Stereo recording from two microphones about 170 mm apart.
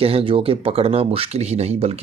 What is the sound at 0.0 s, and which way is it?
Speech, 35° right (ahead or behind).